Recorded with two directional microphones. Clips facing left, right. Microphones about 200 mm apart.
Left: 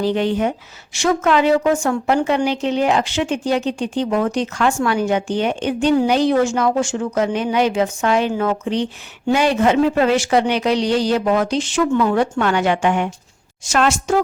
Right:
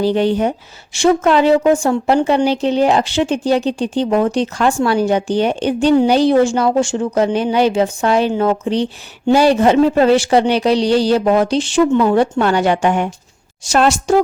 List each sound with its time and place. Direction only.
0.0 s speech: 35° right (ahead or behind)